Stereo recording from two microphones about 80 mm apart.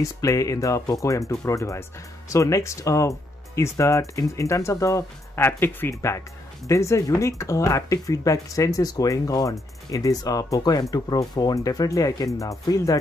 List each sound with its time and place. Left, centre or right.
0.0 s speech: left